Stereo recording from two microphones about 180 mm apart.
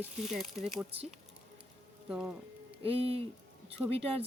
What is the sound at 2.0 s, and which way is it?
Speech, 5° right (ahead or behind).